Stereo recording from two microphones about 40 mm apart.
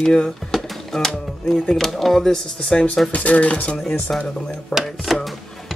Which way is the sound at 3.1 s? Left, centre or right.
Left.